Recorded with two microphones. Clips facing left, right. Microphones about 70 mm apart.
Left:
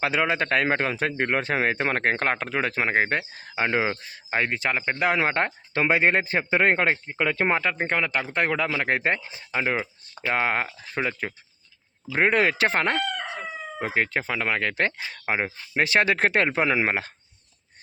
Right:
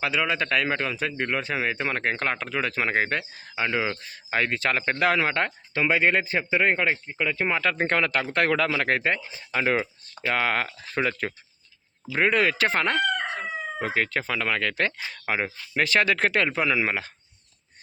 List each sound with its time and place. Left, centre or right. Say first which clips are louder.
0.0 s speech: left 2 dB; left; by 5.2 s centre
5.2 s speech: left 1 dB; left
7.8 s speech: right 1 dB; centre
9.0 s speech: left 1 dB; left
9.7 s a sound: right 2 dB; centre
10.3 s speech: left 1 dB; left
12.1 s speech: left 1 dB; left